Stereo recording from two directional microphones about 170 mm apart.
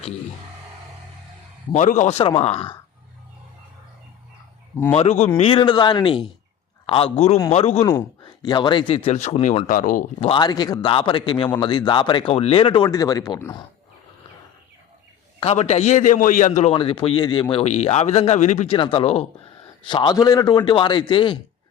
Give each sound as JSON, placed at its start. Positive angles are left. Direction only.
{"t": 1.7, "sound": "speech", "side_deg": 45}
{"t": 4.9, "sound": "speech", "side_deg": 40}
{"t": 8.2, "sound": "speech", "side_deg": 25}
{"t": 10.2, "sound": "speech", "side_deg": 30}
{"t": 15.4, "sound": "a man's voice", "side_deg": 40}
{"t": 16.7, "sound": "speech", "side_deg": 30}